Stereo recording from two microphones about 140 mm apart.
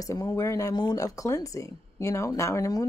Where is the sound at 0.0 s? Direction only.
25° left (ahead or behind).